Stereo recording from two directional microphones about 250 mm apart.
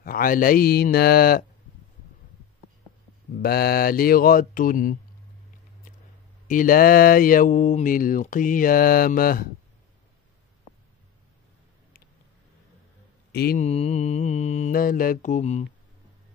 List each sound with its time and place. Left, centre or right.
0.0 s speech: left
3.3 s speech: left
6.4 s speech: left
13.3 s speech: left
13.7 s mantra: left